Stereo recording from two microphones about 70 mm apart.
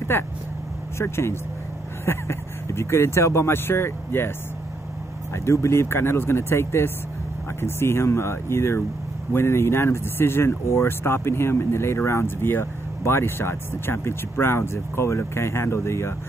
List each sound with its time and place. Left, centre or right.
0.1 s speech: left
5.3 s speech: left